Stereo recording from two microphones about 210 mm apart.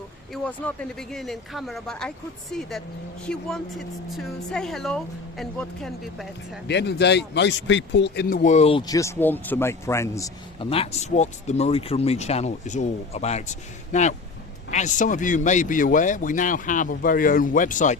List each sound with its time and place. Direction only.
0.4 s speech: 5° left (ahead or behind)
6.7 s speech: 55° left (ahead or behind); by 10.3 s 15° left (ahead or behind)
10.6 s speech: 25° left (ahead or behind)